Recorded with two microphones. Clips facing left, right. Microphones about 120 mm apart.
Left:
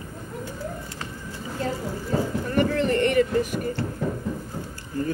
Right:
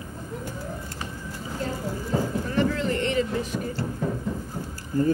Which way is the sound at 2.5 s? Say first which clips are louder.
Left 4 dB; 60° left (ahead or behind).